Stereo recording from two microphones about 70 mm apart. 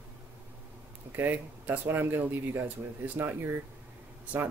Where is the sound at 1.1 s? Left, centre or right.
Right.